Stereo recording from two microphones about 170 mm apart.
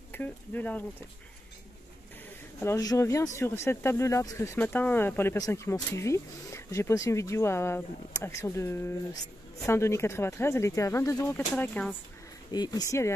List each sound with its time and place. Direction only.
0.1 s speech: 10° left (ahead or behind)
2.6 s speech: 20° left (ahead or behind)
12.4 s speech: 25° left (ahead or behind)